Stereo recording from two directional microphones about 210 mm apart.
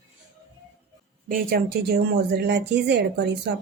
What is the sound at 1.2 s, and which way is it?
Speech, 45° right (ahead or behind).